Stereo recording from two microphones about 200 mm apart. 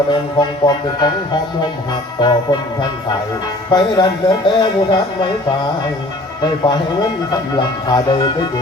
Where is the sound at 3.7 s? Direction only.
20° left (ahead or behind).